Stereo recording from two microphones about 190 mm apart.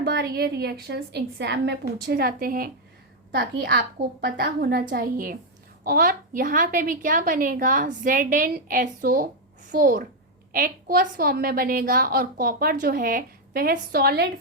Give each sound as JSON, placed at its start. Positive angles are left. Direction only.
{"t": 0.0, "sound": "a woman's voice", "side_deg": -55}